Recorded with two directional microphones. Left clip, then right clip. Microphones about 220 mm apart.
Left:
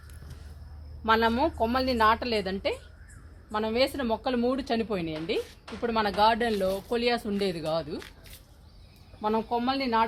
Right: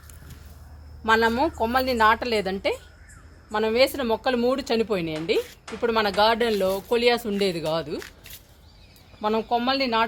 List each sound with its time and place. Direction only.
1.0 s a woman's voice: 25° right (ahead or behind); by 7.9 s 45° right (ahead or behind)
9.2 s speech: 45° right (ahead or behind)